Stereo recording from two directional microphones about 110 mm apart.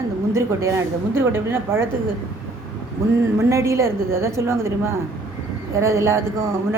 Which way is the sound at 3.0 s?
25° right (ahead or behind).